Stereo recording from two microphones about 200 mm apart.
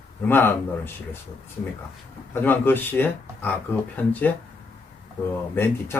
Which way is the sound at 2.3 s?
10° left (ahead or behind).